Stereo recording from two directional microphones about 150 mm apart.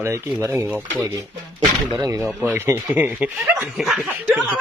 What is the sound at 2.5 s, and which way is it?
Speech, 15° right (ahead or behind).